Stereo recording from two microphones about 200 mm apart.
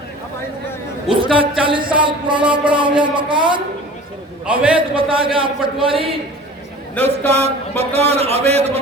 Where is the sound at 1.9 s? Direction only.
25° right (ahead or behind).